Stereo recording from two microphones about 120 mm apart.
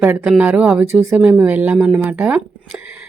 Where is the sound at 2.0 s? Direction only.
15° right (ahead or behind).